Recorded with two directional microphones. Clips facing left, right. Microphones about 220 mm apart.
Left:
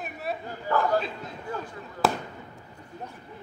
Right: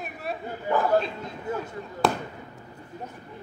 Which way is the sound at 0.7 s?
15° right (ahead or behind).